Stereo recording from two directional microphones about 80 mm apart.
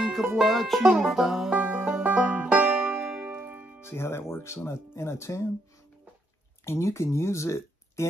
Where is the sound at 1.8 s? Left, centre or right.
Centre.